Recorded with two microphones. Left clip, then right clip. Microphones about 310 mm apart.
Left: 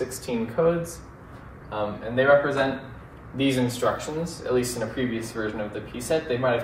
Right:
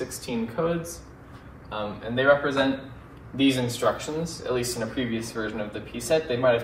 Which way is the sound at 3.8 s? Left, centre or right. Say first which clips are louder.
Even; centre.